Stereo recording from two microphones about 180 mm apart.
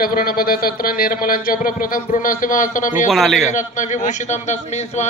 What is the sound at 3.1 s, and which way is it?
Speech, centre (ahead or behind).